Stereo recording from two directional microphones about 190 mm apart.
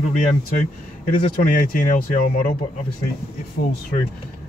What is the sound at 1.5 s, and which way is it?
Speech, 45° left (ahead or behind).